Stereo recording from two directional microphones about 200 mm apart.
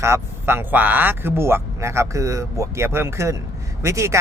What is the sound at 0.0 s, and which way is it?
Speech, 15° right (ahead or behind).